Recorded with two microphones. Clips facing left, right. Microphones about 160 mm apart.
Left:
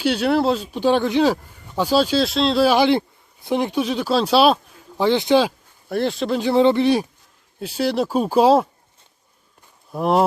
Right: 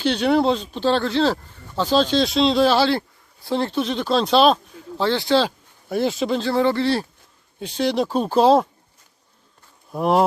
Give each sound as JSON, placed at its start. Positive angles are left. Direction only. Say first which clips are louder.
{"t": 0.0, "sound": "speech", "louder": "even", "side_deg": 5}
{"t": 2.6, "sound": "speech", "louder": "left 2 dB", "side_deg": 15}
{"t": 5.5, "sound": "speech", "louder": "even", "side_deg": 0}
{"t": 6.4, "sound": "speech", "louder": "left 6 dB", "side_deg": 20}
{"t": 7.6, "sound": "speech", "louder": "even", "side_deg": 5}
{"t": 9.9, "sound": "speech", "louder": "even", "side_deg": 0}